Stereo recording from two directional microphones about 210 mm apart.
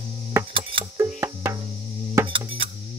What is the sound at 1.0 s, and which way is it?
Music, 15° right (ahead or behind).